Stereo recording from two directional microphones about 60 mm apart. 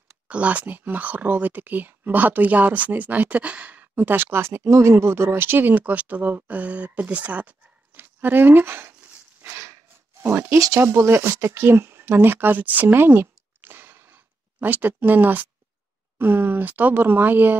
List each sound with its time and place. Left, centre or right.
0.3 s speech: right
10.2 s speech: right